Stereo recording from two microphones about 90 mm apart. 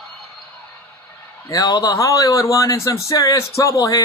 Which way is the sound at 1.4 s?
40° left (ahead or behind).